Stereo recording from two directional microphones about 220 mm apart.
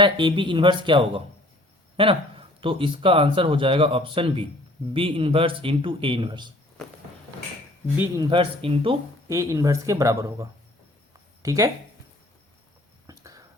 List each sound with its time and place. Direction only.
0.0 s speech: 20° right (ahead or behind)
8.2 s speech: 25° right (ahead or behind)
11.4 s speech: 15° right (ahead or behind)
13.1 s whispering: 15° right (ahead or behind)